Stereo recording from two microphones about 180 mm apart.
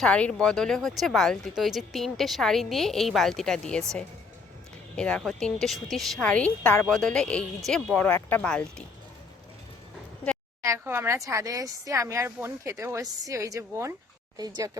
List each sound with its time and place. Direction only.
0.0 s speech: 5° left (ahead or behind)
4.9 s speech: 5° left (ahead or behind)
10.2 s a sound: 5° left (ahead or behind)
10.6 s speech: 15° right (ahead or behind)